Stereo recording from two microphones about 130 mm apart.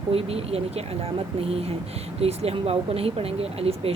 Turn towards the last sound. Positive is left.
turn(degrees=-50)  # may be behind; listen again after turning